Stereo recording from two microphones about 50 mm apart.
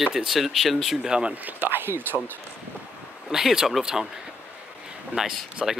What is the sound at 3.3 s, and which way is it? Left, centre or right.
Speech, centre.